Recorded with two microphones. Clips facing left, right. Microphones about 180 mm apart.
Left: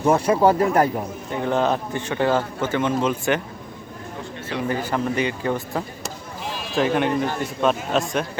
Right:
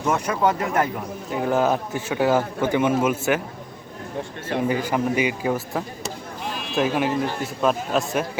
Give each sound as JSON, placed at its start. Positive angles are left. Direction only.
{"t": 0.0, "sound": "speech", "side_deg": 30}
{"t": 1.3, "sound": "a man's voice", "side_deg": -5}
{"t": 4.7, "sound": "a man's voice", "side_deg": -15}